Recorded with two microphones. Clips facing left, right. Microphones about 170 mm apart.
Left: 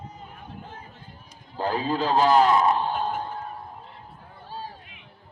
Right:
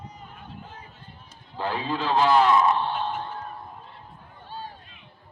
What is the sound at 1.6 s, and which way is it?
A man's voice, 40° left (ahead or behind).